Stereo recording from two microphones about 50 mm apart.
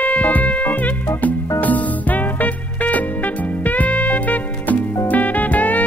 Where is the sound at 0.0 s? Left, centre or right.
Left.